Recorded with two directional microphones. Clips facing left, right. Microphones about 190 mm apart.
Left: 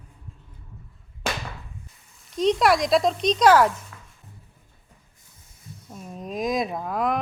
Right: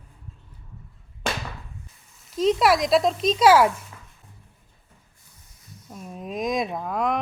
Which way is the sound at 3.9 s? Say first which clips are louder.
Even; 20° right (ahead or behind).